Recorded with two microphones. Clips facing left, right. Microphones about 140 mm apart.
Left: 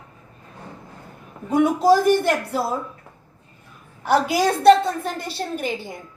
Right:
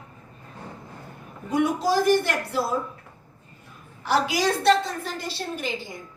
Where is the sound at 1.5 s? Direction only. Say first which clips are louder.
Left 6 dB; 55° left (ahead or behind).